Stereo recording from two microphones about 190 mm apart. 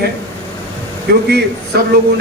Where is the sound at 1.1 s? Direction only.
60° right (ahead or behind).